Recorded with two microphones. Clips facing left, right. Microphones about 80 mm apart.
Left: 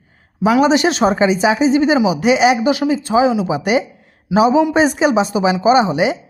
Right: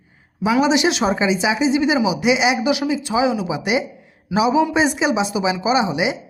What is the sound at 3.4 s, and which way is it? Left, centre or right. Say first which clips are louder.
Speech: left 4 dB; left.